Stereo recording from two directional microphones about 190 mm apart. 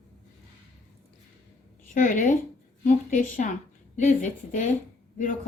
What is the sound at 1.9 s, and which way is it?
A woman's voice, 45° left (ahead or behind).